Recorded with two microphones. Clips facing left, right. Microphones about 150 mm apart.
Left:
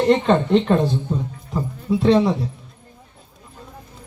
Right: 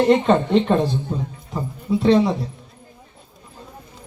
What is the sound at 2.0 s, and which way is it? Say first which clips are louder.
Speech: even; centre (ahead or behind).